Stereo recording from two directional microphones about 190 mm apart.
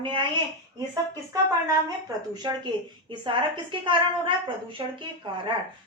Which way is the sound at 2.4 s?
20° right (ahead or behind).